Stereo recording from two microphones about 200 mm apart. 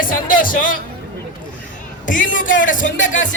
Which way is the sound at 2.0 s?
40° left (ahead or behind).